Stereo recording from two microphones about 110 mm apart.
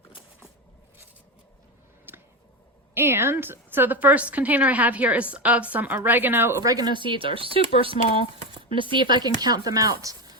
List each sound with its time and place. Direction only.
2.1 s a sound: 20° right (ahead or behind)
2.9 s a woman's voice: 20° right (ahead or behind)
6.6 s speech: 35° right (ahead or behind)